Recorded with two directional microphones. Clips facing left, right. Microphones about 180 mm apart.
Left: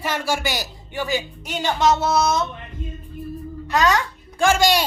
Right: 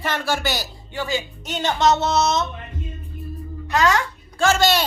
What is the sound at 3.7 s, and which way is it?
A woman's voice, 15° left (ahead or behind).